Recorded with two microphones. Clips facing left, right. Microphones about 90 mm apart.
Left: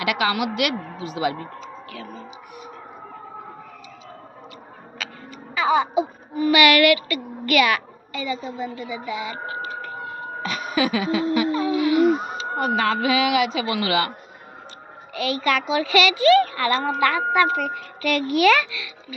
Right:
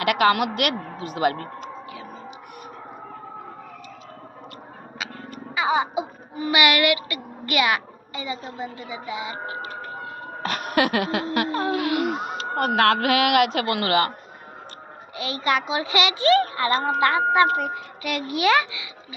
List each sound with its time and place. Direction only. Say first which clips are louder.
0.0 s a woman's voice: right 3 dB; 50° right (ahead or behind)
1.9 s music: left 1 dB; 15° right (ahead or behind)
5.5 s speech: left 3 dB; 15° right (ahead or behind)
10.4 s a sound: right 1 dB; 65° right (ahead or behind)
11.5 s wheeze: left 4 dB; 60° right (ahead or behind)
12.4 s speech: right 1 dB; 70° right (ahead or behind); by 14.1 s 50° right (ahead or behind)
15.1 s a child's voice: left 2 dB; 20° right (ahead or behind)